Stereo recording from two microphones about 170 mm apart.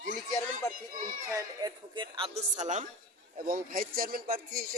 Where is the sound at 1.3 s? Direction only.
25° right (ahead or behind); by 2.9 s 45° right (ahead or behind).